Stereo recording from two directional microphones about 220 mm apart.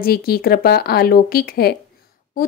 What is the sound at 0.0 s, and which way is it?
Speech, 45° left (ahead or behind).